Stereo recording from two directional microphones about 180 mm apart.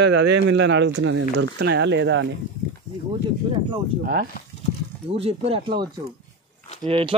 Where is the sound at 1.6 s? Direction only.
70° right (ahead or behind).